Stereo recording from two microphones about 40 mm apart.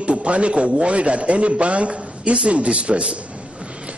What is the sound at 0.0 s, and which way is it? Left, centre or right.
A man's voice, right.